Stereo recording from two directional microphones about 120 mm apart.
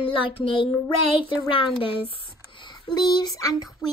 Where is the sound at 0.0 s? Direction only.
45° left (ahead or behind).